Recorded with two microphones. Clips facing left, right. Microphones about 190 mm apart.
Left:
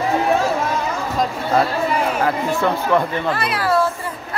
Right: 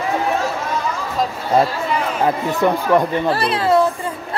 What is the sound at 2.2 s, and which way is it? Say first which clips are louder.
Speech: right 2 dB; 15° right (ahead or behind).